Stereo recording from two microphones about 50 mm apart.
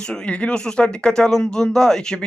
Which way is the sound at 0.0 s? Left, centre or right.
Centre.